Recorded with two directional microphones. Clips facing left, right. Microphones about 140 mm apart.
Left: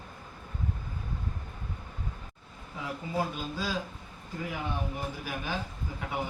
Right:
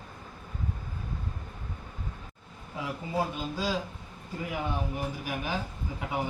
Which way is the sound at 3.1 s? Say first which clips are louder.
Right 2 dB; 25° right (ahead or behind).